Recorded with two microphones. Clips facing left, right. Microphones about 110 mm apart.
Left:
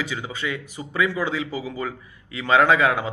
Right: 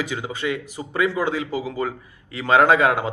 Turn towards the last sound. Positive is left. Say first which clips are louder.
# right 2 dB
turn(degrees=-45)  # may be behind; listen again after turning